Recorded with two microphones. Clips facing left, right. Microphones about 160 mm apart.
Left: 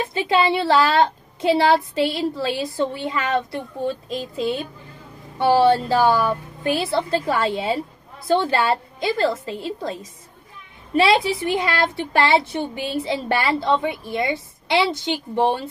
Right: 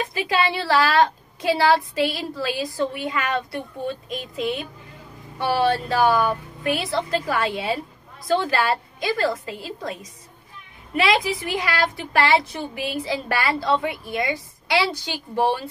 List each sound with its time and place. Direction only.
0.0 s a woman's voice: 25° left (ahead or behind)
11.0 s a woman's voice: 30° left (ahead or behind)